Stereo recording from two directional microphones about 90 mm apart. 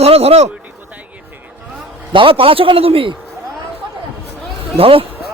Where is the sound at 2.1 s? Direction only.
75° right (ahead or behind).